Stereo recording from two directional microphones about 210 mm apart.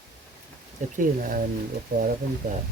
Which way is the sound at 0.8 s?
35° right (ahead or behind).